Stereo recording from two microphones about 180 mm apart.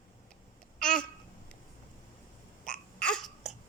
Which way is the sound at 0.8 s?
5° left (ahead or behind).